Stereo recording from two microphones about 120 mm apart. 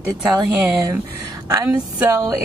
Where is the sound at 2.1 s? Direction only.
30° right (ahead or behind).